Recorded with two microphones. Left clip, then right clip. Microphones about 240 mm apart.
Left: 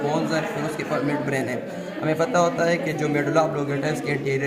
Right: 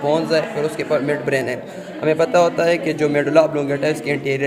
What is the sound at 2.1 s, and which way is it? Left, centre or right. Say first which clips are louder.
A man's voice: right 6 dB; right.